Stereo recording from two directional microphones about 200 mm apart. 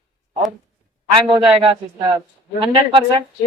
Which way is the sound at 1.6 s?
30° right (ahead or behind).